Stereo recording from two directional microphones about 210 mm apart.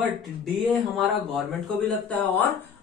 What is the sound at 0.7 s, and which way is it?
A man's voice, centre (ahead or behind).